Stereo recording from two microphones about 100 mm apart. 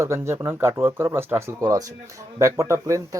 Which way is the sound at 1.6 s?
35° right (ahead or behind).